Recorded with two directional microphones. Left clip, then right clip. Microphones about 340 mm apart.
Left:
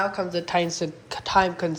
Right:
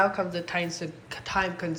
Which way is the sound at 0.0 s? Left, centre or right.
Centre.